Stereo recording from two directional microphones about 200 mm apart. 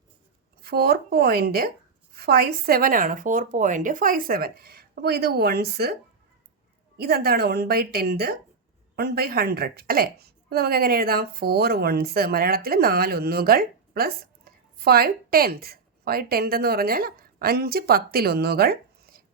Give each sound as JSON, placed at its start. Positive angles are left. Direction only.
{"t": 0.6, "sound": "a woman's voice", "side_deg": -50}